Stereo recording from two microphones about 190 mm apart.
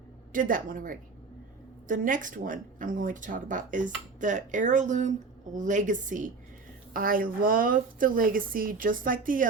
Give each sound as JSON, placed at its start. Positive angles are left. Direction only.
{"t": 0.3, "sound": "a woman's voice", "side_deg": -45}